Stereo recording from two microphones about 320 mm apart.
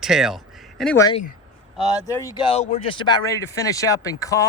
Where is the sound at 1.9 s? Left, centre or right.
Centre.